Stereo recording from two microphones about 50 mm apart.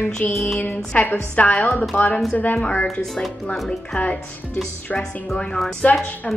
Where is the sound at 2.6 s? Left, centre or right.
Left.